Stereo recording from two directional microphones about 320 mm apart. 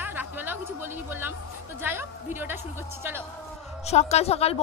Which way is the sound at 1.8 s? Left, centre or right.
Centre.